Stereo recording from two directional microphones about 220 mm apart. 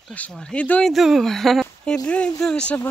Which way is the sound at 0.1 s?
5° left (ahead or behind).